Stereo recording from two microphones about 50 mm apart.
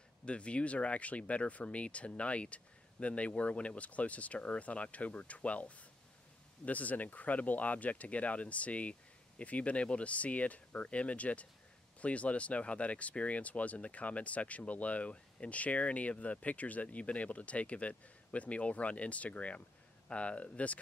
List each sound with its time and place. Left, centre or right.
0.2 s speech: left